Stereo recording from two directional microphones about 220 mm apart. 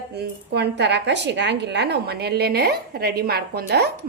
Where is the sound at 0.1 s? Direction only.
50° right (ahead or behind).